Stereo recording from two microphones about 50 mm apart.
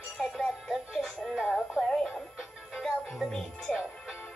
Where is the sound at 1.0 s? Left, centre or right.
Centre.